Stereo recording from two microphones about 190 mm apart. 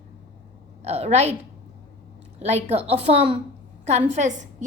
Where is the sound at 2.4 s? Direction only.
35° right (ahead or behind).